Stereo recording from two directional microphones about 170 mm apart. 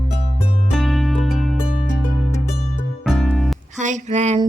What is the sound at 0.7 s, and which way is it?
Music, centre (ahead or behind).